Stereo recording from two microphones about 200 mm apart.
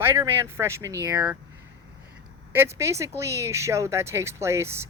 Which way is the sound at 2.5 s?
10° right (ahead or behind).